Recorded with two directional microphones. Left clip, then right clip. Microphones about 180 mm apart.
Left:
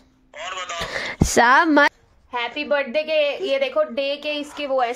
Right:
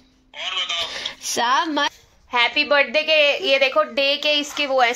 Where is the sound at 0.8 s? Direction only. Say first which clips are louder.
Left 2 dB; 55° left (ahead or behind); by 1.9 s 70° left (ahead or behind).